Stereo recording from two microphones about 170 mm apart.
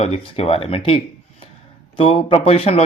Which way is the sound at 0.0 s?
35° left (ahead or behind).